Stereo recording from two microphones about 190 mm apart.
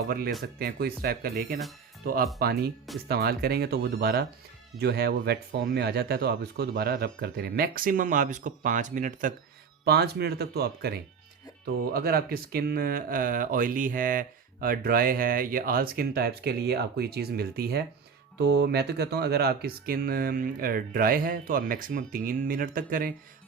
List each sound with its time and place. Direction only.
0.6 s speech: 55° right (ahead or behind)
9.8 s speech: 60° right (ahead or behind)